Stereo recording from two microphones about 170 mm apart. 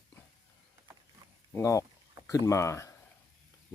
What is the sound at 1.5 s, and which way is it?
Speech, 15° left (ahead or behind).